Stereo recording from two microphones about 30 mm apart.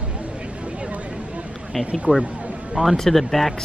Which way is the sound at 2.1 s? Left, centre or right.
Right.